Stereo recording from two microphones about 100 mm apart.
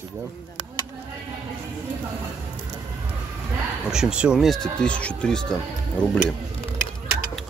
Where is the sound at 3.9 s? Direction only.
10° right (ahead or behind); by 6.1 s 10° left (ahead or behind).